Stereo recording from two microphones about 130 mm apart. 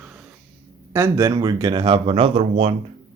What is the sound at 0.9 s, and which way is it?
Speech, 20° right (ahead or behind).